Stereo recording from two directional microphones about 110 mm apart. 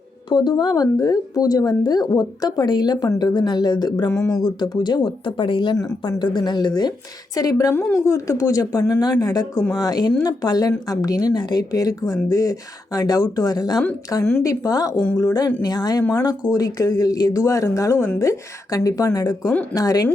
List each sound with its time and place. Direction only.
0.3 s speech: 40° left (ahead or behind)
7.7 s a woman's voice: 15° left (ahead or behind)
8.0 s speech: 30° left (ahead or behind)